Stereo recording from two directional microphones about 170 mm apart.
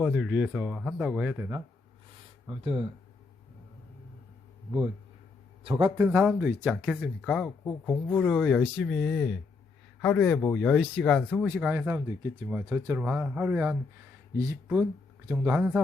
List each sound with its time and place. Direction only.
0.0 s speech: 5° right (ahead or behind)
2.5 s speech: 30° right (ahead or behind)
6.0 s speech: 5° right (ahead or behind)
6.9 s a man's voice: 5° left (ahead or behind)
11.4 s speech: 10° right (ahead or behind)